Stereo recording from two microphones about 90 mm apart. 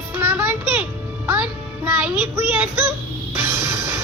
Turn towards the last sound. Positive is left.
turn(degrees=-25)  # may be behind; listen again after turning